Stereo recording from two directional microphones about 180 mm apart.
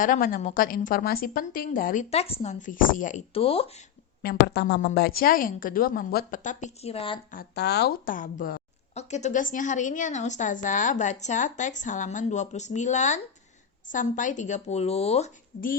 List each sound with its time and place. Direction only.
0.0 s a woman's voice: 50° left (ahead or behind)
3.3 s speech: 30° left (ahead or behind)
4.2 s a woman's voice: 65° left (ahead or behind); by 7.2 s 30° left (ahead or behind)
7.5 s a woman's voice: 65° left (ahead or behind); by 15.3 s 35° left (ahead or behind)